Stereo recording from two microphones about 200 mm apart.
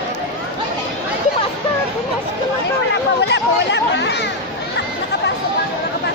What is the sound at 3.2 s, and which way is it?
Chatter, 60° left (ahead or behind).